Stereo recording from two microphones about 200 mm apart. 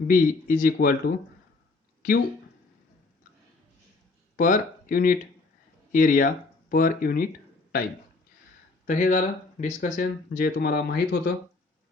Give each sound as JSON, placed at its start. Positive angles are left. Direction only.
{"t": 0.1, "sound": "speech", "side_deg": 45}
{"t": 4.4, "sound": "speech", "side_deg": 45}
{"t": 8.9, "sound": "speech", "side_deg": 40}